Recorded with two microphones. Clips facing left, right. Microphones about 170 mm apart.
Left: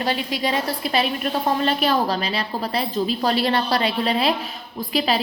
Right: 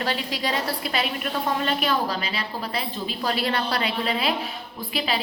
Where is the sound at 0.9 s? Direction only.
30° left (ahead or behind).